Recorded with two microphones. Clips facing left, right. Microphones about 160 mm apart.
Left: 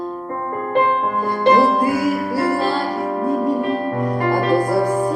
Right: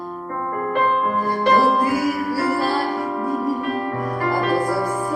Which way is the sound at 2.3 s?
20° left (ahead or behind).